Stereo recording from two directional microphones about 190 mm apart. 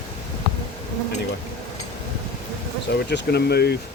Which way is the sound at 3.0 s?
60° left (ahead or behind).